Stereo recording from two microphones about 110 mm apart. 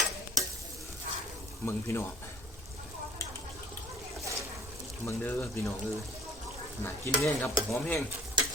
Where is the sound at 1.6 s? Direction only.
25° left (ahead or behind).